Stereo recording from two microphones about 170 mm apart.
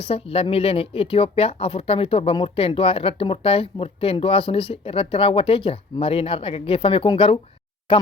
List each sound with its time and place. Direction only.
0.0 s speech: 35° left (ahead or behind)